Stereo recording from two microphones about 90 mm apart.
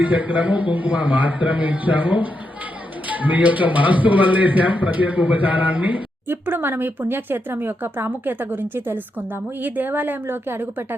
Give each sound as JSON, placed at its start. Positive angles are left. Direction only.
{"t": 0.0, "sound": "a man's voice", "side_deg": -20}